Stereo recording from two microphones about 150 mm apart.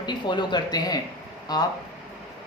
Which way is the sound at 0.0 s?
30° left (ahead or behind).